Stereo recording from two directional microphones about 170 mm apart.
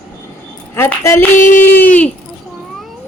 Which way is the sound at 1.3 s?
50° left (ahead or behind).